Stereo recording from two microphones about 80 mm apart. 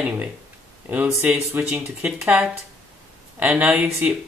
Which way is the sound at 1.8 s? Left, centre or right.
Centre.